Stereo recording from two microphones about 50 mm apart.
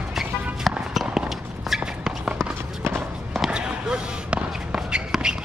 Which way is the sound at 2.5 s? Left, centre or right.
Right.